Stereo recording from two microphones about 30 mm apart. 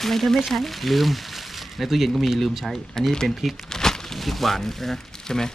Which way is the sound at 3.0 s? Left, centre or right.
Left.